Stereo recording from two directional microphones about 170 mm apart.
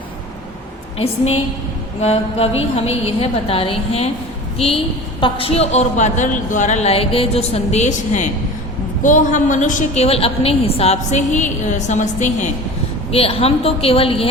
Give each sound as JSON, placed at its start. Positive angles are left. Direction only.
{"t": 0.9, "sound": "a woman's voice", "side_deg": 35}